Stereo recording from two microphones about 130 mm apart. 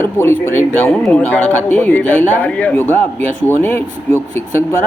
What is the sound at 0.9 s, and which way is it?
Speech, 10° left (ahead or behind).